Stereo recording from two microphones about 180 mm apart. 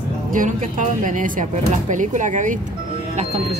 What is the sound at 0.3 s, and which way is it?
Speech, 45° right (ahead or behind).